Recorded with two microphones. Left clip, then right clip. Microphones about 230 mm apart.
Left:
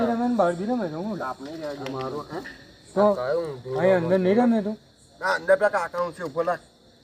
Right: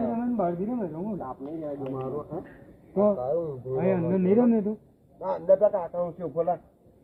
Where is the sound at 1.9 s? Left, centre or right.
Centre.